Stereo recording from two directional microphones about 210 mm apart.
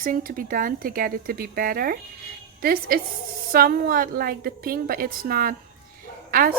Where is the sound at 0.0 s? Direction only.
40° right (ahead or behind).